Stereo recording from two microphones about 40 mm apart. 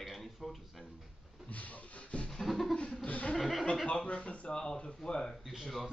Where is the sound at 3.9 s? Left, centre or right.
Left.